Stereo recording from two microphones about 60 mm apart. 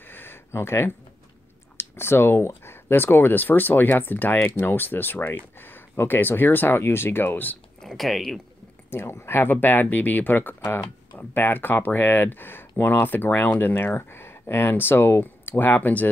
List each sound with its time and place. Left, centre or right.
0.0 s a sound: left
1.8 s speech: left
7.8 s speech: centre
8.9 s speech: left